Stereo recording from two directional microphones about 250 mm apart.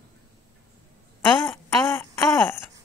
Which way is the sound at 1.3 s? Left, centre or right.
Centre.